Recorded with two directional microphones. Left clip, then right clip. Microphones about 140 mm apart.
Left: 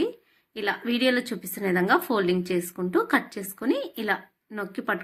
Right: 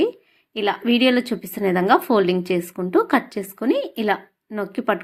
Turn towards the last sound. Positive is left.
turn(degrees=-35)  # may be behind; listen again after turning